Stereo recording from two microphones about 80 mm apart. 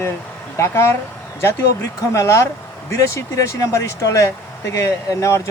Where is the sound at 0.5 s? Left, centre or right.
Left.